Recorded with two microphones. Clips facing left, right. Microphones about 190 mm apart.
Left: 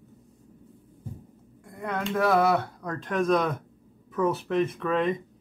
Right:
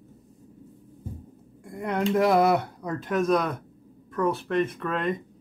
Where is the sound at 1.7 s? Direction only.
20° right (ahead or behind).